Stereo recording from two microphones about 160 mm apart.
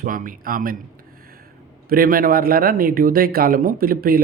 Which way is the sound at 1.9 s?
65° right (ahead or behind).